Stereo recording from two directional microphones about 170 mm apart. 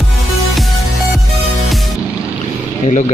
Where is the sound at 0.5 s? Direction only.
Centre (ahead or behind).